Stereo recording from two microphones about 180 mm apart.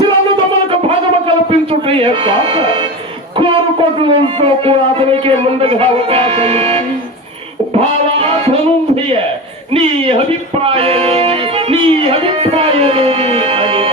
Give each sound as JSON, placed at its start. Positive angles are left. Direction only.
{"t": 1.5, "sound": "speech", "side_deg": -30}
{"t": 3.3, "sound": "a sound", "side_deg": -30}
{"t": 4.1, "sound": "speech", "side_deg": -30}
{"t": 10.6, "sound": "music", "side_deg": -35}